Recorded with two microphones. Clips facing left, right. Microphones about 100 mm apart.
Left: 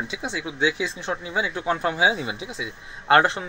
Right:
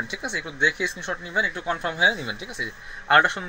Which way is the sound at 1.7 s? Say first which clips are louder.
Left 4 dB; 35° left (ahead or behind).